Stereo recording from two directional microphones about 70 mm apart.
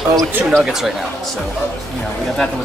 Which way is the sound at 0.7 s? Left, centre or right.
Centre.